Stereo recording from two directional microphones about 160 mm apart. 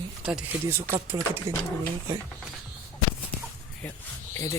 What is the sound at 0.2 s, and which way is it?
Speech, 5° right (ahead or behind).